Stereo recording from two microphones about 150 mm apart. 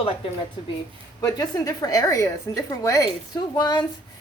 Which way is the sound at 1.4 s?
25° left (ahead or behind).